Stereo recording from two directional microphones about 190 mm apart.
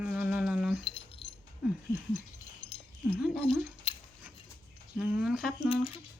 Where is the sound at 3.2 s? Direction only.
Centre (ahead or behind).